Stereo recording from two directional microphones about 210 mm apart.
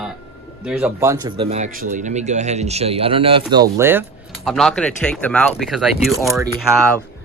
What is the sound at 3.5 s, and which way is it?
Speech, 15° right (ahead or behind).